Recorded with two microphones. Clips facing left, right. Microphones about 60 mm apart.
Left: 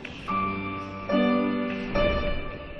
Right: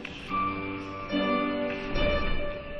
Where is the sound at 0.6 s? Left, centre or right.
Left.